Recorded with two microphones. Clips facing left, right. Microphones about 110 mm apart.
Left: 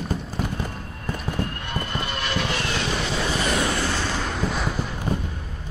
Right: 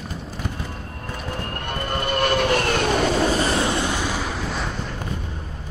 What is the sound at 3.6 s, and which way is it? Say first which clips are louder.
Vehicle: right 2 dB; 20° right (ahead or behind).